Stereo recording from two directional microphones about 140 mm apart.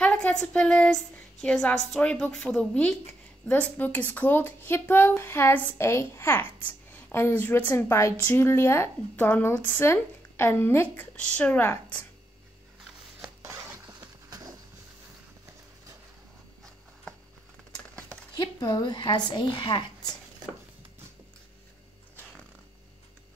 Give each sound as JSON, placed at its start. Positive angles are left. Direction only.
{"t": 0.0, "sound": "a woman's voice", "side_deg": 10}
{"t": 13.2, "sound": "a sound", "side_deg": -20}
{"t": 18.4, "sound": "a woman's voice", "side_deg": 30}